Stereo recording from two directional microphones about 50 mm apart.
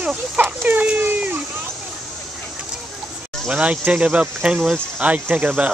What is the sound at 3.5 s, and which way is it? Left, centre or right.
Speech, right.